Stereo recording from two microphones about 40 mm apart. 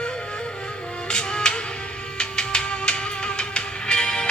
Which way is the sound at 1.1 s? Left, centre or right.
Centre.